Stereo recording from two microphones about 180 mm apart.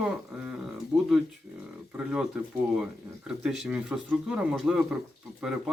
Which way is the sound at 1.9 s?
5° right (ahead or behind).